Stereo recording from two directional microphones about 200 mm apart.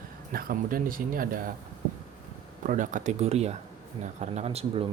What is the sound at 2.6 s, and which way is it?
Speech, 40° right (ahead or behind).